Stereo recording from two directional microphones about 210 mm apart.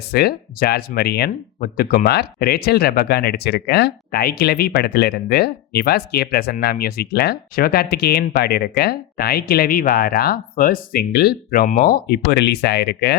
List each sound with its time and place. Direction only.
0.1 s speech: 50° left (ahead or behind)